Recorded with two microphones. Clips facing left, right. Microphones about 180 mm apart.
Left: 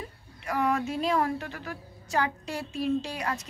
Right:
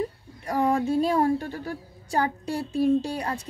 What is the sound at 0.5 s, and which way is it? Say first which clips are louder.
A woman's voice: right 4 dB; 30° right (ahead or behind).